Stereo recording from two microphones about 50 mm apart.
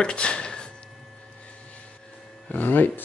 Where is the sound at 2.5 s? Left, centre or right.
Left.